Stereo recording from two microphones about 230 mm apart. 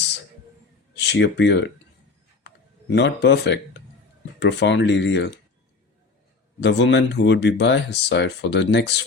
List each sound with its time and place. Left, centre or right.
0.9 s speech: left
2.4 s a sound: left
4.4 s speech: left
6.6 s speech: left